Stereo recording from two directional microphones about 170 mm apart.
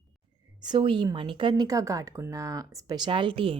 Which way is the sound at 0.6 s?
25° right (ahead or behind).